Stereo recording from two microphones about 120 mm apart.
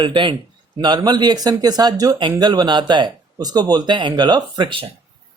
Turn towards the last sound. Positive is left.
turn(degrees=-40)  # may be behind; listen again after turning